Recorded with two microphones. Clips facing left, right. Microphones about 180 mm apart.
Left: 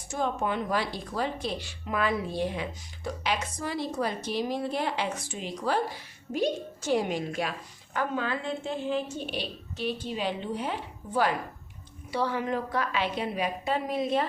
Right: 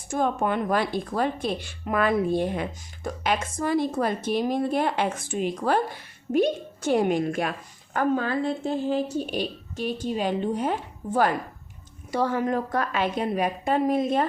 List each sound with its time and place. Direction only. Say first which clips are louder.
0.1 s a woman's voice: right 5 dB; 55° right (ahead or behind)
7.9 s a woman's voice: right 6 dB; 40° right (ahead or behind)